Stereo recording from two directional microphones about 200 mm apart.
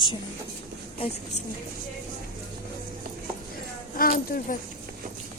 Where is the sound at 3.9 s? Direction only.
45° left (ahead or behind).